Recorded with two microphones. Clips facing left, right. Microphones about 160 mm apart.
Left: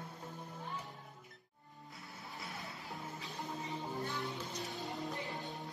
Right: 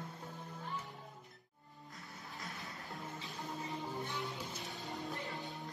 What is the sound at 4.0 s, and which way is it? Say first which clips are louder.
Music: left 1 dB; 20° right (ahead or behind).